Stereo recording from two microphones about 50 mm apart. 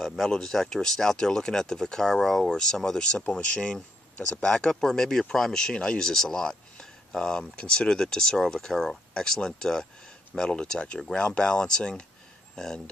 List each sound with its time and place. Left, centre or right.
0.3 s speech: centre